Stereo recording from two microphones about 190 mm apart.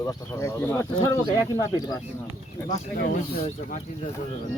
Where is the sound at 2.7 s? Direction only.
35° left (ahead or behind).